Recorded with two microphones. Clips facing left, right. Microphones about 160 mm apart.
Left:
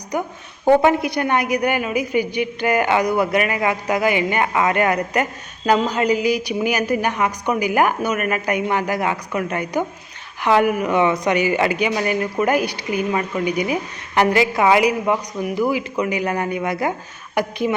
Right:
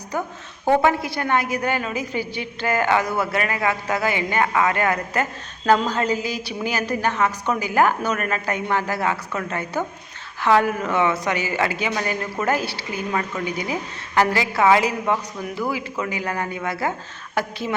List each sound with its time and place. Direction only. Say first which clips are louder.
0.1 s a woman's voice: left 3 dB; 15° left (ahead or behind)